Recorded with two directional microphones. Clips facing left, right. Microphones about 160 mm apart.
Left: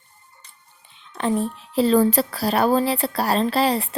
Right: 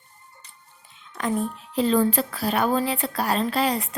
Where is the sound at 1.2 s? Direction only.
30° left (ahead or behind).